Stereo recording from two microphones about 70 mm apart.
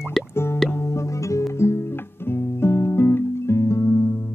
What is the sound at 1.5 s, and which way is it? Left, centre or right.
Guitar, left.